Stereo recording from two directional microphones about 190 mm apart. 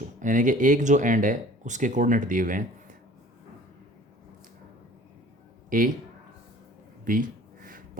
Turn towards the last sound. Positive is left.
turn(degrees=-45)  # may be behind; listen again after turning